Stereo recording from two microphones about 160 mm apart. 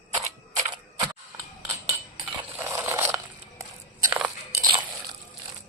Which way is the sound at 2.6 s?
15° right (ahead or behind).